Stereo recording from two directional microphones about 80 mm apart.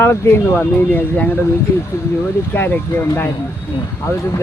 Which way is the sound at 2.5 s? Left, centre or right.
Left.